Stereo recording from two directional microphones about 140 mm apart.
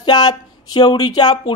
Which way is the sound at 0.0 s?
30° left (ahead or behind).